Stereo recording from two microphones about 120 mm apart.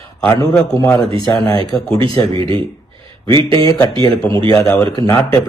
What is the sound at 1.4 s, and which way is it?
Speech, 35° left (ahead or behind).